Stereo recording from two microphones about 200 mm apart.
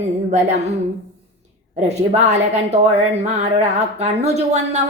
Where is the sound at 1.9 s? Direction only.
35° right (ahead or behind).